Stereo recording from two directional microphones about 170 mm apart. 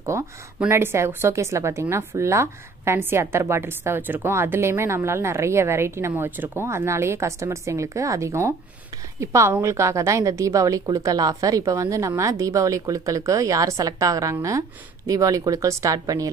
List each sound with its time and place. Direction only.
0.1 s a woman's voice: 15° right (ahead or behind)